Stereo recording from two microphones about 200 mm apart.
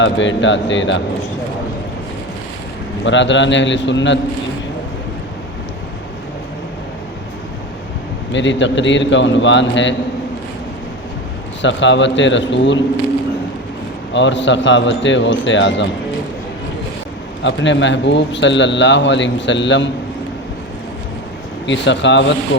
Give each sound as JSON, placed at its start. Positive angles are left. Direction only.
{"t": 0.0, "sound": "speech", "side_deg": 65}
{"t": 3.0, "sound": "speech", "side_deg": 65}
{"t": 8.3, "sound": "speech", "side_deg": 65}
{"t": 11.6, "sound": "speech", "side_deg": 65}
{"t": 14.1, "sound": "speech", "side_deg": 65}
{"t": 17.4, "sound": "speech", "side_deg": 65}
{"t": 21.7, "sound": "speech", "side_deg": 65}